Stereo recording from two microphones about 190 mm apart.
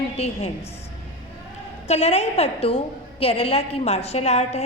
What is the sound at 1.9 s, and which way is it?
A woman's voice, 30° left (ahead or behind).